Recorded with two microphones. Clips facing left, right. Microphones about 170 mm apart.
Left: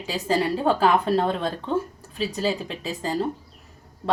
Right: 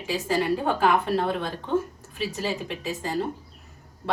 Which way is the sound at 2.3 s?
35° left (ahead or behind).